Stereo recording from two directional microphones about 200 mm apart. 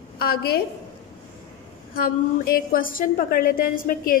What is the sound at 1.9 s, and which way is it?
A woman's voice, 45° left (ahead or behind).